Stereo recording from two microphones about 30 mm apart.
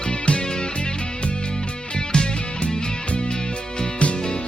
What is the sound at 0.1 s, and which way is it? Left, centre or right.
Music, left.